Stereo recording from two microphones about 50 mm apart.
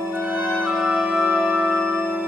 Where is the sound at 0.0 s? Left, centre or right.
Right.